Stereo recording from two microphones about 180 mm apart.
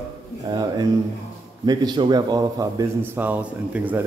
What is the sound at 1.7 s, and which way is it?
A man's voice, 25° right (ahead or behind).